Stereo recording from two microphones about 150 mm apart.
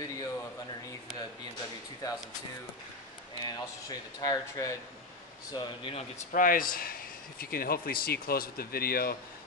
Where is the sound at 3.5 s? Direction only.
25° left (ahead or behind).